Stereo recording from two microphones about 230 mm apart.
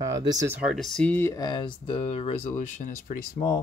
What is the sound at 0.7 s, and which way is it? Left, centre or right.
Speech, centre.